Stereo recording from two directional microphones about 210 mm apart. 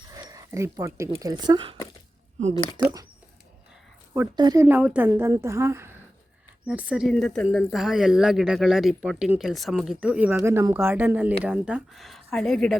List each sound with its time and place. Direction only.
0.1 s speech: 15° right (ahead or behind)
2.8 s a woman's voice: 15° right (ahead or behind)
4.1 s a woman's voice: 15° right (ahead or behind); by 12.7 s centre (ahead or behind)